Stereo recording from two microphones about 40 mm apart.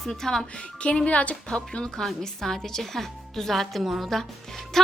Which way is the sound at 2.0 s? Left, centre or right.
Centre.